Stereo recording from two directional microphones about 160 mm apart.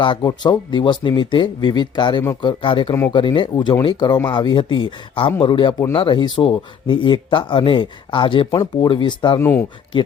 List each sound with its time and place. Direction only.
0.0 s speech: 30° left (ahead or behind)
9.4 s speech: 15° left (ahead or behind)